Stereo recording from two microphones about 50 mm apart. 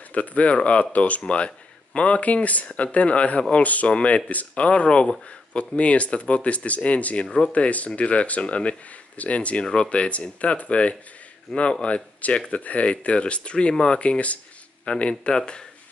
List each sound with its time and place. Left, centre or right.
0.1 s speech: left
7.2 s speech: centre